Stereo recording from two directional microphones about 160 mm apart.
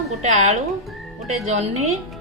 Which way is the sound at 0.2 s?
45° right (ahead or behind).